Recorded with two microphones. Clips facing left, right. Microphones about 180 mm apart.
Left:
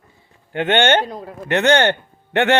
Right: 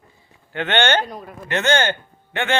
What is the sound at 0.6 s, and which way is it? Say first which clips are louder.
Speech: left 3 dB; 50° left (ahead or behind).